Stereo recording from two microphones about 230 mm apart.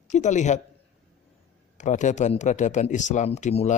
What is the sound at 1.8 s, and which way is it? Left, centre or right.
Speech, left.